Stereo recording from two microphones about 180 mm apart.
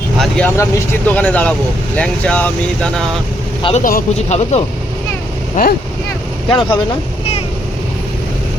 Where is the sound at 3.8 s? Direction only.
55° left (ahead or behind).